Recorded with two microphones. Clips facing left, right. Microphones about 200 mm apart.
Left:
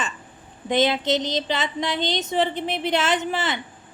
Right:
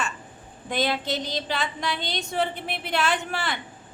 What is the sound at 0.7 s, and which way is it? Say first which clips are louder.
A woman's voice: left 6 dB; 20° left (ahead or behind).